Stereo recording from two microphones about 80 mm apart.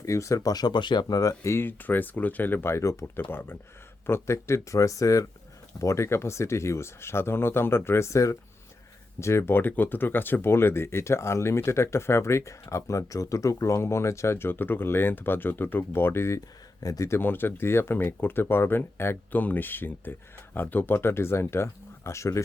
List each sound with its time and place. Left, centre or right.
0.0 s speech: left
0.5 s speech: left
1.0 s speech: left
1.5 s speech: left
3.2 s speech: left
16.8 s speech: left
17.1 s speech: left